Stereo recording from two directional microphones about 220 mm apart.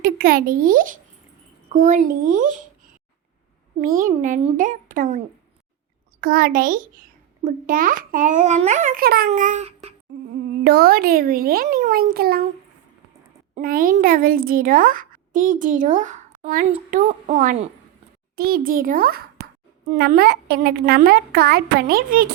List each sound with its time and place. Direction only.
0.0 s a child's voice: 40° right (ahead or behind)
3.8 s a child's voice: 40° right (ahead or behind)
10.6 s a woman's voice: 45° right (ahead or behind)
13.5 s a child's voice: 40° right (ahead or behind)